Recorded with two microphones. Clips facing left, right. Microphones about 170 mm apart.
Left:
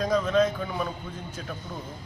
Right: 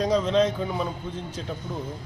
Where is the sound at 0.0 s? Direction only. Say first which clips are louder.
Right 2 dB; 25° right (ahead or behind).